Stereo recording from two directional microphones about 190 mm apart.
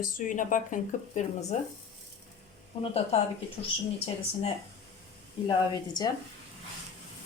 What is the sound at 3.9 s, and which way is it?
Speech, 30° left (ahead or behind).